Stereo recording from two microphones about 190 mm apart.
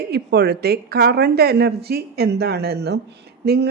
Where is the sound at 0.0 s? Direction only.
55° right (ahead or behind).